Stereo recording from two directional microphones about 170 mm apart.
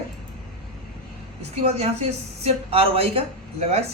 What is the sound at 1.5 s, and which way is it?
Speech, 35° right (ahead or behind).